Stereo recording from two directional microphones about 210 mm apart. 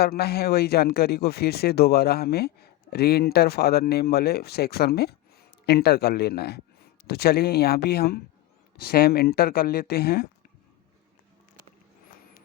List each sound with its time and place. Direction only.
0.0 s speech: 50° left (ahead or behind)